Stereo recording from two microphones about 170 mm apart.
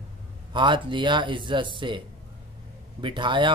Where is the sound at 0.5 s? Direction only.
30° right (ahead or behind).